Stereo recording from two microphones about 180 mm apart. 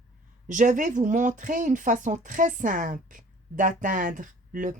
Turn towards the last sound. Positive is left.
turn(degrees=-45)  # may be behind; listen again after turning